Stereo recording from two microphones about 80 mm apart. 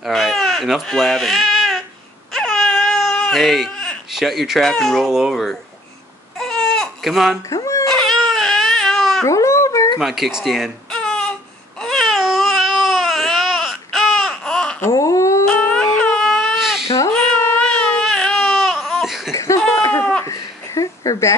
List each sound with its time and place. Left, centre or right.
0.0 s baby cry: centre
4.1 s speech: centre
6.3 s baby cry: centre
7.4 s speech: left
7.9 s baby cry: centre
9.2 s cat: left
9.9 s speech: centre
10.9 s baby cry: centre
14.9 s a sound: left
15.7 s baby cry: centre
16.5 s cat: centre
17.6 s baby cry: centre
19.3 s cough: left
20.2 s a sound: left